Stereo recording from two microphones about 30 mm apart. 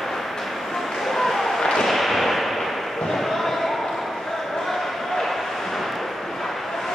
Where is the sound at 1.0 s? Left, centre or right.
Centre.